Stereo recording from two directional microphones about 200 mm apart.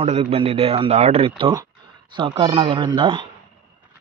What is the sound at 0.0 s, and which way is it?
A man's voice, 30° right (ahead or behind).